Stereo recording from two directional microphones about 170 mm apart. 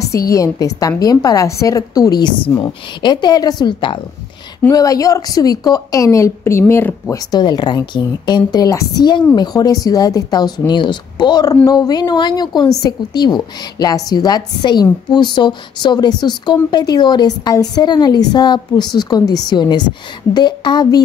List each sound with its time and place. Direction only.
0.0 s speech: 20° left (ahead or behind)